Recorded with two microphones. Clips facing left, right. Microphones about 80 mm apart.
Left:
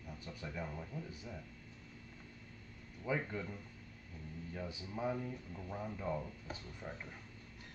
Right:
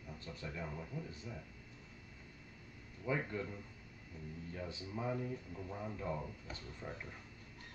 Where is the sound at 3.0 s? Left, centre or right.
Centre.